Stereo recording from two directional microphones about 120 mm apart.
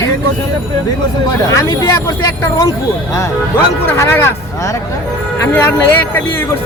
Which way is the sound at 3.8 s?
20° left (ahead or behind).